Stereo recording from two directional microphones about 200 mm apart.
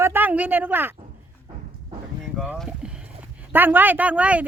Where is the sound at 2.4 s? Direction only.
Centre (ahead or behind).